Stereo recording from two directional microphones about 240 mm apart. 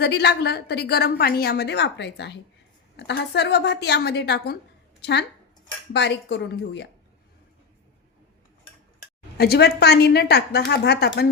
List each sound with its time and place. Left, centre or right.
0.0 s a woman's voice: left
9.4 s a woman's voice: left